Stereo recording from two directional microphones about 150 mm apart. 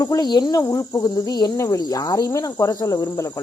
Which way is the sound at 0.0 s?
25° left (ahead or behind).